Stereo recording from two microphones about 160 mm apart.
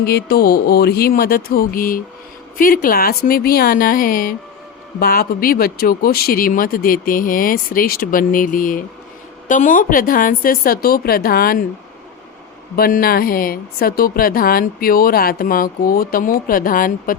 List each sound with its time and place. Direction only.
0.0 s a sound: 85° left; by 2.0 s 65° left (ahead or behind)
2.6 s speech: 60° left (ahead or behind)
12.7 s speech: 65° left (ahead or behind)